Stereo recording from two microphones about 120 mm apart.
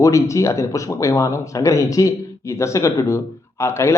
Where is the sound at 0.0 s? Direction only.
25° left (ahead or behind).